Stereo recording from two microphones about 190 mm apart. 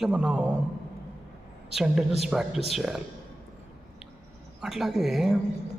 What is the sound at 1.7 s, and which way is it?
A man's voice, centre (ahead or behind).